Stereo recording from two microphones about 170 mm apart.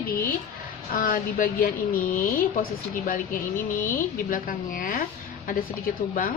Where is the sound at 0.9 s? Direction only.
55° left (ahead or behind).